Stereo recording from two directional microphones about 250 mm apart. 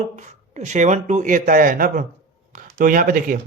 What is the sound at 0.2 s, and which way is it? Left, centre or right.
A man's voice, right.